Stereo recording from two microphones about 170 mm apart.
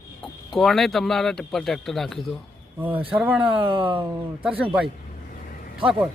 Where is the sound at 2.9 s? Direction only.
30° right (ahead or behind).